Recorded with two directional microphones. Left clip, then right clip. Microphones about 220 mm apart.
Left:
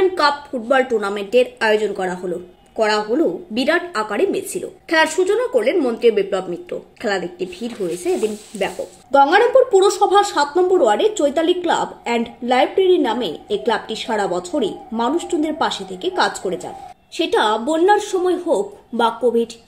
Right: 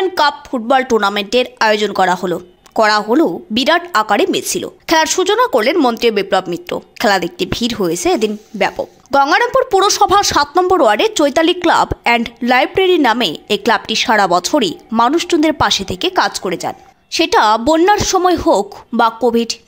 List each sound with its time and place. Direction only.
0.1 s a woman's voice: 40° right (ahead or behind)